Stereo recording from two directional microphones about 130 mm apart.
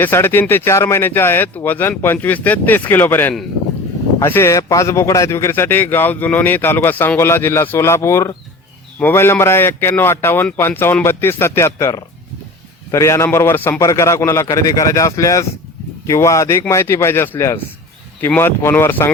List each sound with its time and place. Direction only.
0.0 s a man's voice: 15° left (ahead or behind)